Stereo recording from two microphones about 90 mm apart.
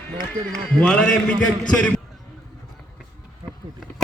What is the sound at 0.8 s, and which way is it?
Speech, 10° left (ahead or behind).